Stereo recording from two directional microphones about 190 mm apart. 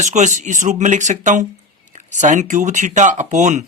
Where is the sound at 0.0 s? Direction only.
40° right (ahead or behind).